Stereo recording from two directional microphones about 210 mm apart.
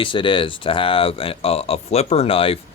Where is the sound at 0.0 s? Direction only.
25° left (ahead or behind).